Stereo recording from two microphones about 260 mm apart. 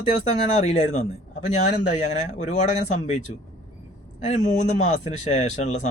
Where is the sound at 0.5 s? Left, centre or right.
Left.